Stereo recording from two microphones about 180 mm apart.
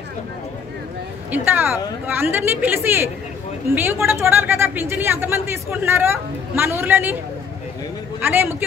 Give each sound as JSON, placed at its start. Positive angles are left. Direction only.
{"t": 1.3, "sound": "speech", "side_deg": -10}
{"t": 8.2, "sound": "speech", "side_deg": -10}